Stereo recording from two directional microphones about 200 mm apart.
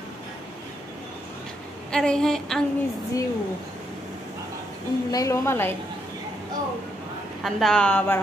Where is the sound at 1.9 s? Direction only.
5° left (ahead or behind).